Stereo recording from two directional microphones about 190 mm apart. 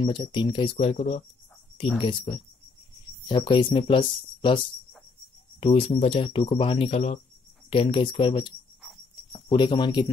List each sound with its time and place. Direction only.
0.0 s speech: 25° left (ahead or behind)
2.0 s speech: 25° left (ahead or behind)
5.6 s speech: 30° left (ahead or behind)